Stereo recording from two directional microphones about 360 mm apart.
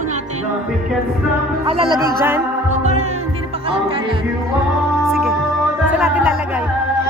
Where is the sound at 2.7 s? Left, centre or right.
Centre.